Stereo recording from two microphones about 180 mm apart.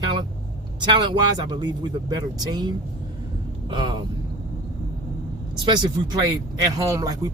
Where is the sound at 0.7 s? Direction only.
25° right (ahead or behind).